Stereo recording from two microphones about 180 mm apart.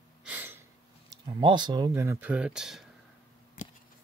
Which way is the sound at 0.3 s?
10° right (ahead or behind).